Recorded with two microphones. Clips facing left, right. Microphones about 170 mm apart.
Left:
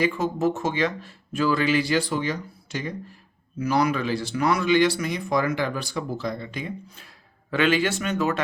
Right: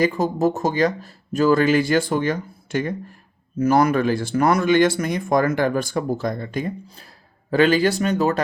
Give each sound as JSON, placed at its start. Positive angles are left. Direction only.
{"t": 0.0, "sound": "speech", "side_deg": -40}
{"t": 6.8, "sound": "speech", "side_deg": -35}